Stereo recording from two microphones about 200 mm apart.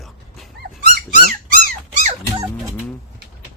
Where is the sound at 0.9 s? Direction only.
45° right (ahead or behind).